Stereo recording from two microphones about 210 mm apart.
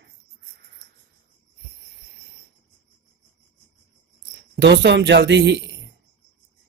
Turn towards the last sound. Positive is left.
turn(degrees=-55)  # may be behind; listen again after turning